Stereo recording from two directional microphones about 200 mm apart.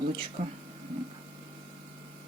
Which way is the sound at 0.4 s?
40° right (ahead or behind).